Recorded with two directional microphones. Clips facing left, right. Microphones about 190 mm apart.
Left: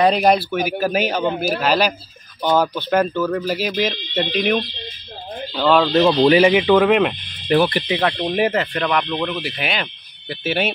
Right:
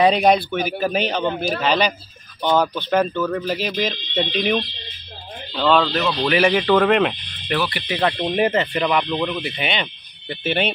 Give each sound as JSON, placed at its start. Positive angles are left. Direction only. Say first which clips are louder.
{"t": 0.0, "sound": "speech", "louder": "even", "side_deg": 0}
{"t": 5.9, "sound": "speech", "louder": "left 7 dB", "side_deg": 30}
{"t": 6.4, "sound": "speech", "louder": "left 3 dB", "side_deg": 10}
{"t": 7.5, "sound": "speech", "louder": "left 7 dB", "side_deg": 35}
{"t": 8.2, "sound": "speech", "louder": "even", "side_deg": 5}